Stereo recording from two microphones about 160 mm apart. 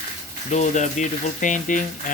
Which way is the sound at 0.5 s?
45° left (ahead or behind).